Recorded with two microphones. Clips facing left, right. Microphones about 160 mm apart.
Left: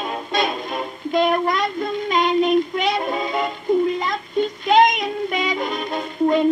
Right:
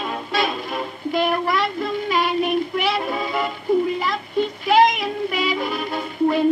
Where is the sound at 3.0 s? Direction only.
20° left (ahead or behind).